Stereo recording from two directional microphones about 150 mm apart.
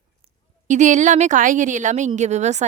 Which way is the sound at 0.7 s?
55° right (ahead or behind).